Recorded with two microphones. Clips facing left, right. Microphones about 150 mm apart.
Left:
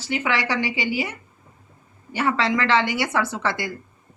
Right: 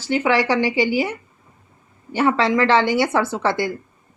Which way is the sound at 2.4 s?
35° right (ahead or behind).